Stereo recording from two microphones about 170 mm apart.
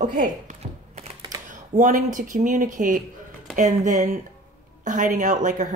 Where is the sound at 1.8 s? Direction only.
50° right (ahead or behind).